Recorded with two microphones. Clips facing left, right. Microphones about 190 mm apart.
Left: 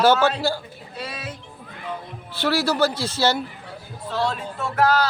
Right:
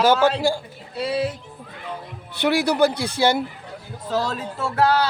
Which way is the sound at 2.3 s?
15° right (ahead or behind).